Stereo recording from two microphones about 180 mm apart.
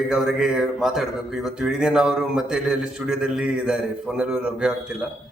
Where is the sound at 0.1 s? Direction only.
5° right (ahead or behind).